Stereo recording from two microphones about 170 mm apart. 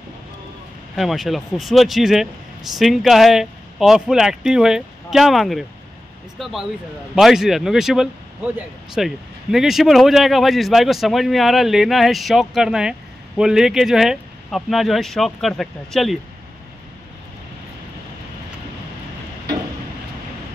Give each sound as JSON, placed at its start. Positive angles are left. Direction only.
{"t": 0.9, "sound": "speech", "side_deg": 0}